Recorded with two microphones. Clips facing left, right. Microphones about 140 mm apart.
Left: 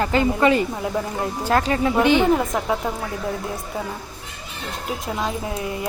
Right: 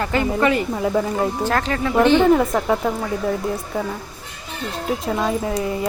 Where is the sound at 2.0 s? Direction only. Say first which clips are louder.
Right 4 dB; 15° left (ahead or behind).